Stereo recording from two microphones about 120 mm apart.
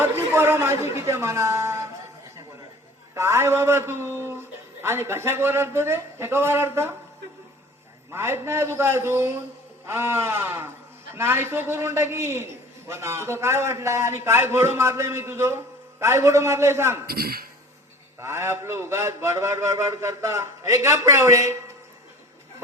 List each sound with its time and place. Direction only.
0.0 s a man's voice: 20° right (ahead or behind)
3.2 s a man's voice: 20° right (ahead or behind)
8.1 s a man's voice: 20° right (ahead or behind)
18.2 s a man's voice: 20° right (ahead or behind)